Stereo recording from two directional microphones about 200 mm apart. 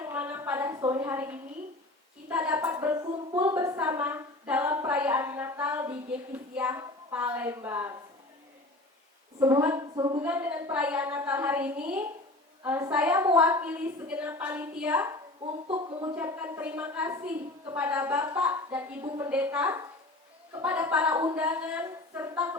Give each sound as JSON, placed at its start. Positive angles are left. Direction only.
{"t": 0.0, "sound": "a sound", "side_deg": -10}
{"t": 2.3, "sound": "a woman's voice", "side_deg": -10}
{"t": 9.4, "sound": "a woman's voice", "side_deg": -15}
{"t": 10.2, "sound": "a woman's voice", "side_deg": -10}
{"t": 15.6, "sound": "speech", "side_deg": -25}
{"t": 16.1, "sound": "a woman's voice", "side_deg": -10}
{"t": 19.3, "sound": "a woman's voice", "side_deg": -5}